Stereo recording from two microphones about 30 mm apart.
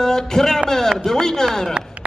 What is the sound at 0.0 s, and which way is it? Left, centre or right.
A man's voice, centre.